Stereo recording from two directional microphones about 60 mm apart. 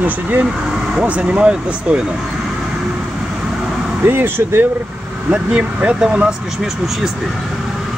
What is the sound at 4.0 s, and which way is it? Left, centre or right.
Speech, right.